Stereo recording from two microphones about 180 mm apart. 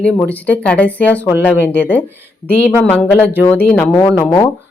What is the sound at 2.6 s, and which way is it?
Speech, 5° left (ahead or behind).